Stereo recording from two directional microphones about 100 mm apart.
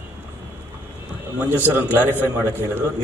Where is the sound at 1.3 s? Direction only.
20° right (ahead or behind).